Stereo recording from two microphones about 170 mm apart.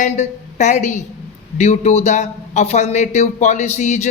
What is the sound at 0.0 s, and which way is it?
A man's voice, 45° left (ahead or behind).